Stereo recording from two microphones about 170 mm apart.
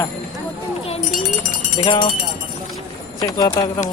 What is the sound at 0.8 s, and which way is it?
Children playing, 35° left (ahead or behind).